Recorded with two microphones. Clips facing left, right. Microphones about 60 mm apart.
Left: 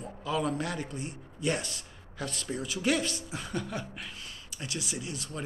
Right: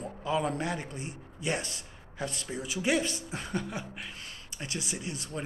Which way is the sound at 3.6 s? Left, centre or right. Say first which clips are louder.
Left 1 dB; centre.